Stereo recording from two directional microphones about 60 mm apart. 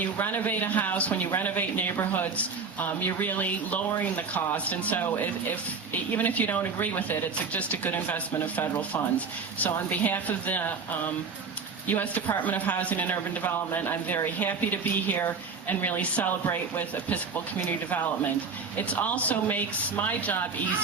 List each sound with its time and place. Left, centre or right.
0.0 s speech: left
11.9 s speech: left
18.9 s speech: left